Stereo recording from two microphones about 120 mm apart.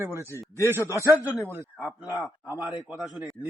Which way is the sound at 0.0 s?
20° right (ahead or behind).